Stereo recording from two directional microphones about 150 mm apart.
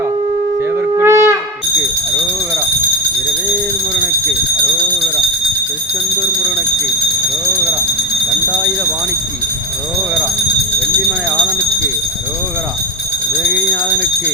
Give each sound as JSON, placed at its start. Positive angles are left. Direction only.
{"t": 0.9, "sound": "shofar", "side_deg": -15}
{"t": 8.4, "sound": "fire alarm", "side_deg": -10}
{"t": 11.3, "sound": "jingle bell", "side_deg": -20}
{"t": 13.5, "sound": "a sound", "side_deg": -10}